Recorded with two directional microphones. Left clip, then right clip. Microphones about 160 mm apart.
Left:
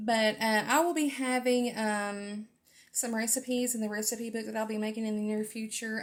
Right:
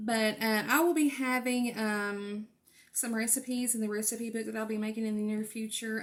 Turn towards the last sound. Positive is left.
turn(degrees=25)  # may be behind; listen again after turning